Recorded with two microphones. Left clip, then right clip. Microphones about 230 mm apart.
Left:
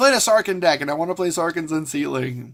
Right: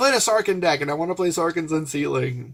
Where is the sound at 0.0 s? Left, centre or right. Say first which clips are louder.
Left 3 dB; left.